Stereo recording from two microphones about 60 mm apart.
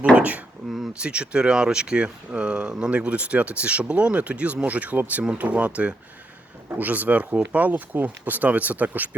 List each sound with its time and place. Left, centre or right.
0.2 s speech: right